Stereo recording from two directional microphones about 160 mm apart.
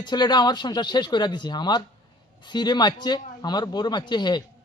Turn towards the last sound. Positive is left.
turn(degrees=25)  # may be behind; listen again after turning